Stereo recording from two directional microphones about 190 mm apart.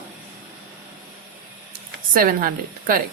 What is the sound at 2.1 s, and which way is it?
Speech, 50° right (ahead or behind).